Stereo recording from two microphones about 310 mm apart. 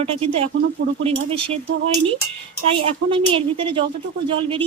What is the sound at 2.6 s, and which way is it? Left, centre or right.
A woman's voice, centre.